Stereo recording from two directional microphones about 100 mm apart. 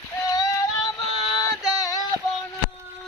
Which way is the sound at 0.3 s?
40° left (ahead or behind).